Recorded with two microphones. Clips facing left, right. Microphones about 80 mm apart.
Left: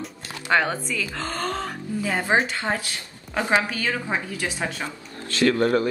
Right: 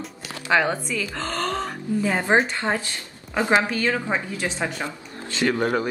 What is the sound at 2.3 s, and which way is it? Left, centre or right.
Speech, centre.